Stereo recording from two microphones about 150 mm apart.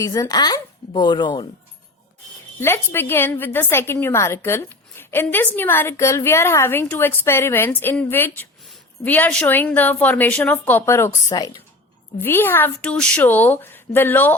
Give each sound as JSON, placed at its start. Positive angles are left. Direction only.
{"t": 0.0, "sound": "a woman's voice", "side_deg": 25}
{"t": 2.6, "sound": "a woman's voice", "side_deg": 15}